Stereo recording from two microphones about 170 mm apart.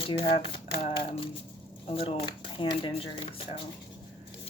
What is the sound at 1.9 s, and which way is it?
Speech, 35° left (ahead or behind).